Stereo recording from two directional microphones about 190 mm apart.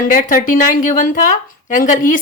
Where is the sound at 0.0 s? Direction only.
45° left (ahead or behind).